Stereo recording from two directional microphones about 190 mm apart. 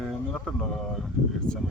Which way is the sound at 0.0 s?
Centre (ahead or behind).